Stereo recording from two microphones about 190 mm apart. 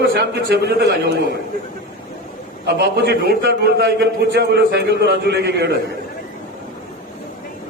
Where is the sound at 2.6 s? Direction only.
60° right (ahead or behind).